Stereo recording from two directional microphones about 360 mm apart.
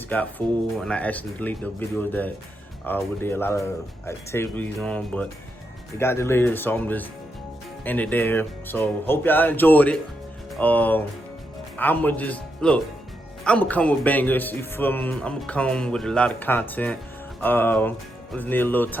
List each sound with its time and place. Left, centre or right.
0.1 s a man's voice: centre